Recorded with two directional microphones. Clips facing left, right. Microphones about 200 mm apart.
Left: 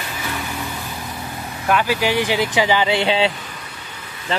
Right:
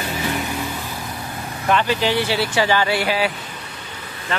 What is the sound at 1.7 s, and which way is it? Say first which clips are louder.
Speech: even; 10° left (ahead or behind).